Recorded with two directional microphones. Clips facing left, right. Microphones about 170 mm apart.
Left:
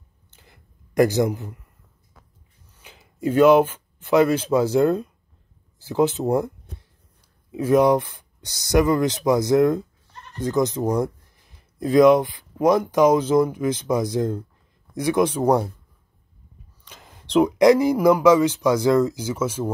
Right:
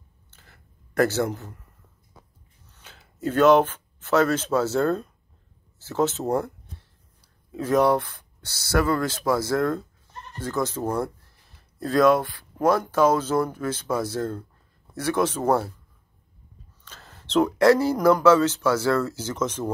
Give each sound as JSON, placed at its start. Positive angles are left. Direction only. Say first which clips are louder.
{"t": 0.3, "sound": "a sound", "louder": "left 2 dB", "side_deg": 15}
{"t": 2.7, "sound": "speech", "louder": "left 2 dB", "side_deg": 10}
{"t": 7.5, "sound": "speech", "louder": "left 3 dB", "side_deg": 10}
{"t": 16.8, "sound": "speech", "louder": "left 1 dB", "side_deg": 15}